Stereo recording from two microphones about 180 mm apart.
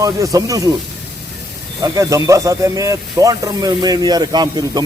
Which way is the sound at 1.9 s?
20° right (ahead or behind).